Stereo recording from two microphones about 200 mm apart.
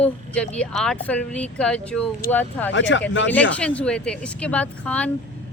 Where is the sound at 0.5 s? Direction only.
5° left (ahead or behind).